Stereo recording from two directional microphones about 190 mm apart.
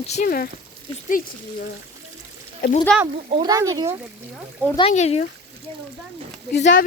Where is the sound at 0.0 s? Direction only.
40° left (ahead or behind).